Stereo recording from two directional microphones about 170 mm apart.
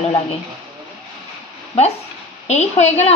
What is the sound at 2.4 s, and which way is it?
Speech, 40° left (ahead or behind).